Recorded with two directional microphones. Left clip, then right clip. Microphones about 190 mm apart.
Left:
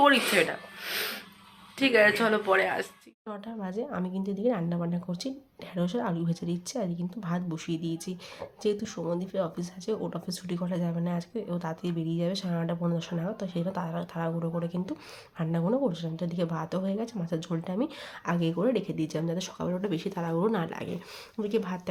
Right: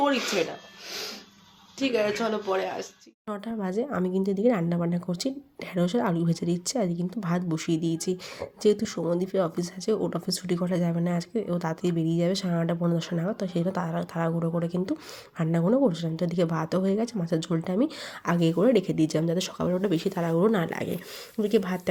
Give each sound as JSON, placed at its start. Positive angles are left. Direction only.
{"t": 0.0, "sound": "speech", "side_deg": 0}
{"t": 1.8, "sound": "speech", "side_deg": -5}
{"t": 3.2, "sound": "speech", "side_deg": -25}